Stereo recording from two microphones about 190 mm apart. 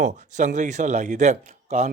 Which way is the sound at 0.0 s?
40° right (ahead or behind).